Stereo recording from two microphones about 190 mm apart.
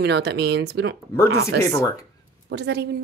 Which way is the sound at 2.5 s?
65° right (ahead or behind).